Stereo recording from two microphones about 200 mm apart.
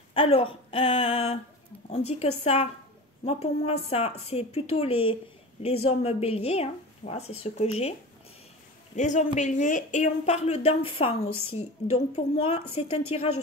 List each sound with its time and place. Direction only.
0.1 s a woman's voice: 30° left (ahead or behind)
8.9 s a woman's voice: 35° left (ahead or behind)